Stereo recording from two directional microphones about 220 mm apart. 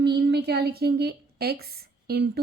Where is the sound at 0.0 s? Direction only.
50° right (ahead or behind).